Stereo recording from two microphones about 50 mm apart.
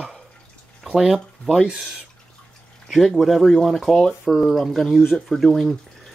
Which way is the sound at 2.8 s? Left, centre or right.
Centre.